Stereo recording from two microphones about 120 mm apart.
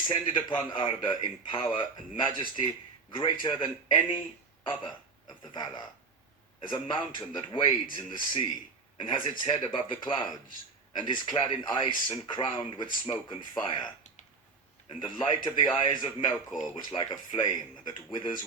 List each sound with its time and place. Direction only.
0.1 s a man's voice: 45° left (ahead or behind)
14.8 s a man's voice: 40° left (ahead or behind)